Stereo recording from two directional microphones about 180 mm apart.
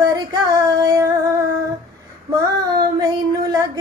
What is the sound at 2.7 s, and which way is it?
Child singing, 20° right (ahead or behind).